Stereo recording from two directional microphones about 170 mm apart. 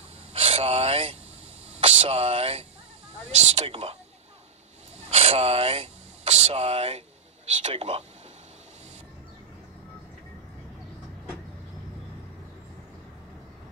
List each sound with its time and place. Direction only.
0.3 s vehicle: 35° right (ahead or behind)
1.8 s speech: 35° right (ahead or behind)
5.1 s speech: 40° right (ahead or behind)